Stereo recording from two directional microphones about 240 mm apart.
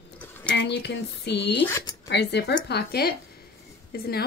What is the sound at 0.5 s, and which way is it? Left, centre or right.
A woman's voice, left.